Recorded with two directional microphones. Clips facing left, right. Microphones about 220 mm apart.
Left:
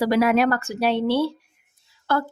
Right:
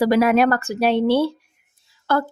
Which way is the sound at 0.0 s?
50° right (ahead or behind).